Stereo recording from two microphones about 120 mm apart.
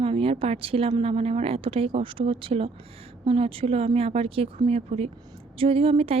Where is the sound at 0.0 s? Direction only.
50° right (ahead or behind).